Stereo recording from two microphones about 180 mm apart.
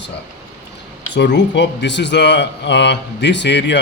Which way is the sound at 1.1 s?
75° left (ahead or behind).